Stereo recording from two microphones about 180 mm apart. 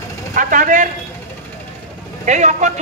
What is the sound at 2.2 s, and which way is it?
Speech, 40° right (ahead or behind).